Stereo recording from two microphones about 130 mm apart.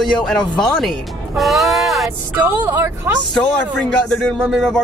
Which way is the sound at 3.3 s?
5° left (ahead or behind).